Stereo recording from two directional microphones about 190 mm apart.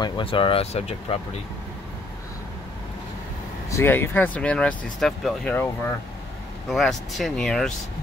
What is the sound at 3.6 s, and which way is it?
Speech, 15° left (ahead or behind).